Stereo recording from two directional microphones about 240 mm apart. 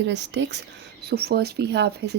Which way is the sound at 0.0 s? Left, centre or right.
Right.